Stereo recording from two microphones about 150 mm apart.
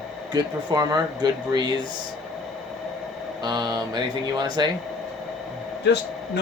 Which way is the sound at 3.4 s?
25° right (ahead or behind).